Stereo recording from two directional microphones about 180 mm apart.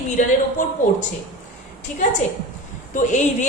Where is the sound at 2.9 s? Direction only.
45° left (ahead or behind).